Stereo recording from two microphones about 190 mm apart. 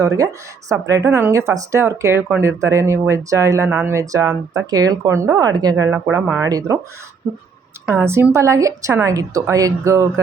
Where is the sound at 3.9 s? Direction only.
15° right (ahead or behind).